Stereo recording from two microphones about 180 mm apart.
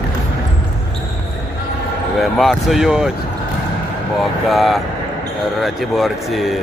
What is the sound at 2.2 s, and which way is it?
Speech, centre (ahead or behind).